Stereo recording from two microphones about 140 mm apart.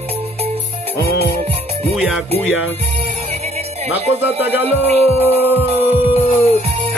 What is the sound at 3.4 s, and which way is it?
Music, 50° right (ahead or behind).